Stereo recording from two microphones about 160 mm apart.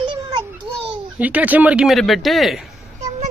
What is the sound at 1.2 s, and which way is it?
Speech, 10° right (ahead or behind).